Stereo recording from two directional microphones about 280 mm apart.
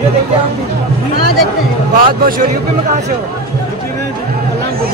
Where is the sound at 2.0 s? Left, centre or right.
Right.